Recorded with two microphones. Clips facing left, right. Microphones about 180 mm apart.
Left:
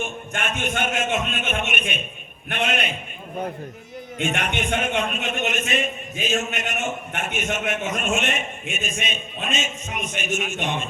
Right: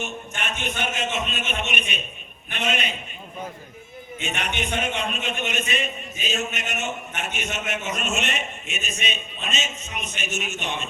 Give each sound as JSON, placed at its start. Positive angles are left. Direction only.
{"t": 0.0, "sound": "a man's voice", "side_deg": 50}
{"t": 4.2, "sound": "a man's voice", "side_deg": 50}